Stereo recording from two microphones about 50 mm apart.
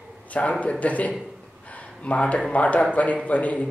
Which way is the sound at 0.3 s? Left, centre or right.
Left.